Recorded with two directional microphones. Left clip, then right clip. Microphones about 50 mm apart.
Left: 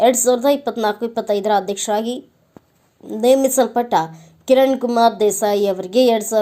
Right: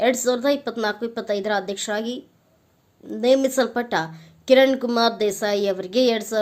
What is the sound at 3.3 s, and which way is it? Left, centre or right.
A woman's voice, left.